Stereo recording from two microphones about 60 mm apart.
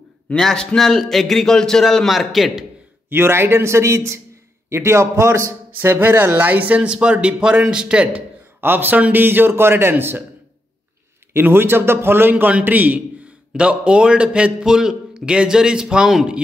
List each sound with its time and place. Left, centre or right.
0.4 s a man's voice: centre
3.1 s a man's voice: right
5.8 s speech: right; by 8.2 s centre
8.5 s a man's voice: right
11.3 s a man's voice: right
13.5 s a man's voice: centre